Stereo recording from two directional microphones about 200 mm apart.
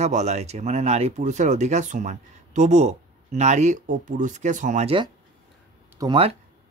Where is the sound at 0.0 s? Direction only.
35° right (ahead or behind).